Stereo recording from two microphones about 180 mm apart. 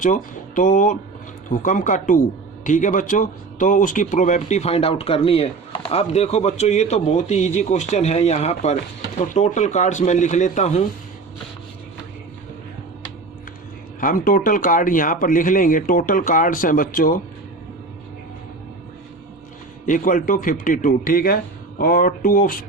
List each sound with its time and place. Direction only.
0.0 s a man's voice: 45° left (ahead or behind)
14.0 s a man's voice: 50° left (ahead or behind)
19.8 s a man's voice: 45° left (ahead or behind)